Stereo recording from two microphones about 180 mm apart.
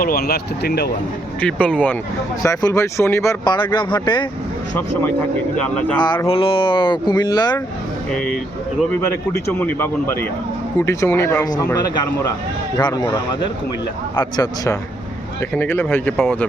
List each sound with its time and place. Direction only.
0.0 s speech: 60° left (ahead or behind)
1.4 s speech: 5° left (ahead or behind)
2.4 s speech: 20° left (ahead or behind)
5.5 s speech: 5° left (ahead or behind)
6.2 s speech: 30° left (ahead or behind)
9.5 s speech: 10° left (ahead or behind)
15.5 s speech: 10° left (ahead or behind)